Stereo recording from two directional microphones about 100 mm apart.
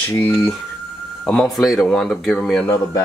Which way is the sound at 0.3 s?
5° left (ahead or behind).